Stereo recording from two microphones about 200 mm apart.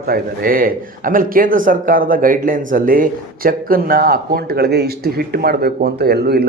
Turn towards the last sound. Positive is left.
turn(degrees=-55)  # may be behind; listen again after turning